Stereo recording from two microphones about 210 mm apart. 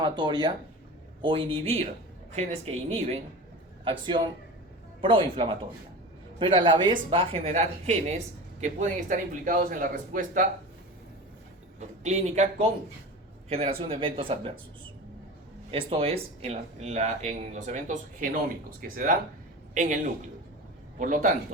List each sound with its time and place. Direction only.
0.0 s speech: 20° right (ahead or behind); by 10.4 s 40° right (ahead or behind)
11.8 s speech: 35° right (ahead or behind)
15.7 s speech: 25° right (ahead or behind)
21.0 s speech: 40° right (ahead or behind)